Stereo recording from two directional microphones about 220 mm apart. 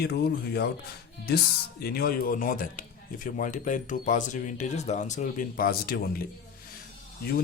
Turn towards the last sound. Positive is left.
turn(degrees=45)  # may be behind; listen again after turning